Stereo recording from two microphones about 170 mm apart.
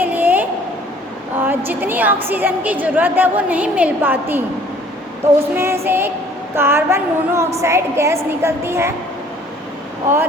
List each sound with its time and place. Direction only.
0.0 s a sound: 10° right (ahead or behind)
1.4 s a woman's voice: 10° right (ahead or behind)
5.5 s a woman's voice: 15° right (ahead or behind)